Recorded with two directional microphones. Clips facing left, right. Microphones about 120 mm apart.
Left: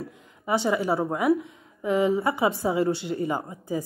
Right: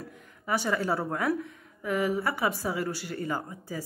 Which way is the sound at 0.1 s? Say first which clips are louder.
Left 4 dB; 20° left (ahead or behind).